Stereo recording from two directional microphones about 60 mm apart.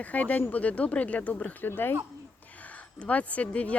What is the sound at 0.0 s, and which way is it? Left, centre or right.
Speech, left.